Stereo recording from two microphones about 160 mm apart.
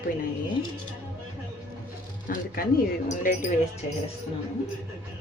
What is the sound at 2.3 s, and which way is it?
Speech, 65° left (ahead or behind).